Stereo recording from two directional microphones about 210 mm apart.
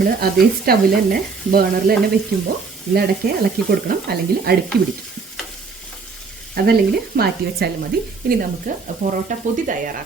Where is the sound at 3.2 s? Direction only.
45° right (ahead or behind).